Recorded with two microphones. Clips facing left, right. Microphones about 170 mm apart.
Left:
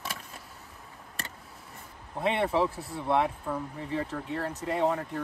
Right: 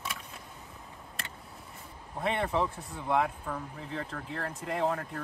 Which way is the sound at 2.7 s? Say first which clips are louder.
Left 4 dB; 35° left (ahead or behind).